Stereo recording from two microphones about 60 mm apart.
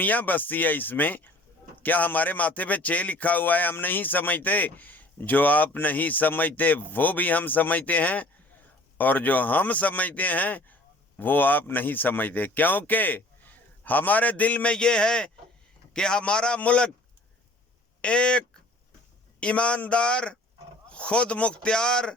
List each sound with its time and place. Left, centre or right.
0.0 s speech: left
18.0 s speech: centre